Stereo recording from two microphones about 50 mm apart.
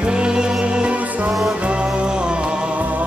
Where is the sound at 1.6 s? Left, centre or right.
Right.